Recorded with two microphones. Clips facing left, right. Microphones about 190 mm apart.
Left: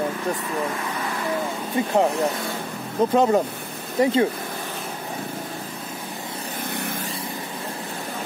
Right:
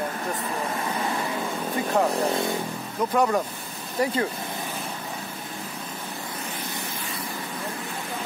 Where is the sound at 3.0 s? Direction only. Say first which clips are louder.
Left 5 dB; 25° left (ahead or behind).